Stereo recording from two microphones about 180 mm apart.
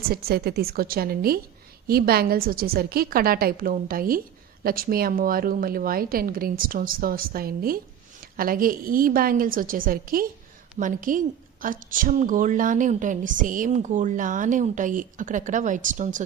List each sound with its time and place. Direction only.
0.1 s a woman's voice: 60° right (ahead or behind)